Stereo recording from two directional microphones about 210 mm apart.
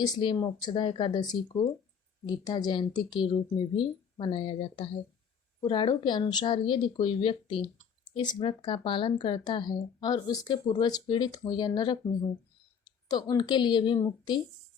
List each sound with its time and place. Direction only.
0.0 s speech: 20° left (ahead or behind)
2.4 s speech: 20° left (ahead or behind)
13.1 s speech: 20° left (ahead or behind)